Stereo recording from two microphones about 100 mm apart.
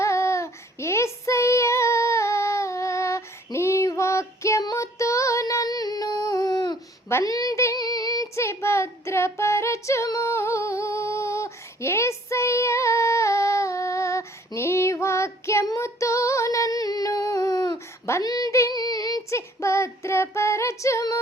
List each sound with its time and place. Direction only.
0.0 s child singing: 30° left (ahead or behind)
4.6 s female singing: 35° left (ahead or behind)
7.3 s child singing: 35° left (ahead or behind)
15.6 s female singing: 30° left (ahead or behind)
18.3 s child singing: 35° left (ahead or behind)
19.4 s child singing: 25° left (ahead or behind)